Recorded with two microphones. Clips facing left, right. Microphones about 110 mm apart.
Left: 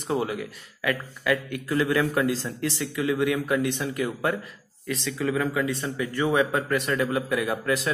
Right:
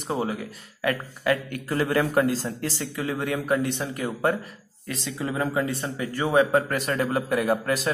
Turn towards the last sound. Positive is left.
turn(degrees=-35)  # may be behind; listen again after turning